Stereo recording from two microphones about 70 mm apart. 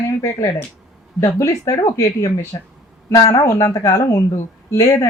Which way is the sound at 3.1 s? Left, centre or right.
Left.